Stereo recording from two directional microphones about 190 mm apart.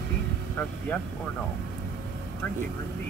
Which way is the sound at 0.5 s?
10° left (ahead or behind).